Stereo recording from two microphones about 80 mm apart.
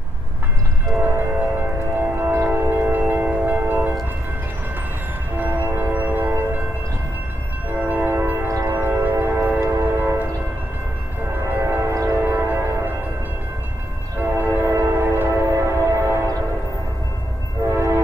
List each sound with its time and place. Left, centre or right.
0.9 s train: right
5.4 s music: right
7.9 s train: right
8.6 s music: right
9.7 s train: right
11.4 s music: right
12.2 s music: right
14.7 s music: right
17.6 s train: right